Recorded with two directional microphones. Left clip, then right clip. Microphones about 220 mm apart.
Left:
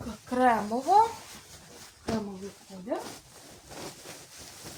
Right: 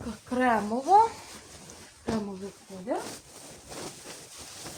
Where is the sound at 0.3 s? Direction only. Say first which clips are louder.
Left 1 dB; 25° right (ahead or behind).